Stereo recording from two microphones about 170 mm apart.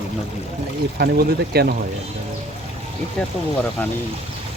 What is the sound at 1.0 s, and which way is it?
Speech, 65° right (ahead or behind).